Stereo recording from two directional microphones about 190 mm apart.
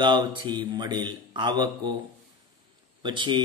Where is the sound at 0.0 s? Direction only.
25° right (ahead or behind).